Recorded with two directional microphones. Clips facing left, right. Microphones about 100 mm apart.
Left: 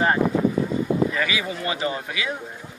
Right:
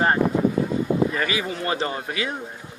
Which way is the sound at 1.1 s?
40° right (ahead or behind).